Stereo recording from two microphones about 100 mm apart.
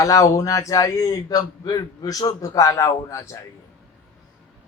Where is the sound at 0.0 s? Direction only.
35° left (ahead or behind).